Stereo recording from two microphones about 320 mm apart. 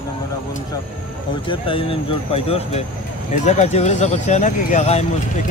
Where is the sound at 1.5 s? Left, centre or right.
Centre.